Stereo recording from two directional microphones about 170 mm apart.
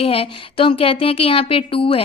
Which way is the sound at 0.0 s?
35° left (ahead or behind).